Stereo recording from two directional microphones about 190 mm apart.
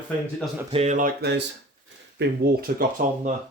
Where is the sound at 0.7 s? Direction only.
35° right (ahead or behind); by 2.8 s 50° right (ahead or behind).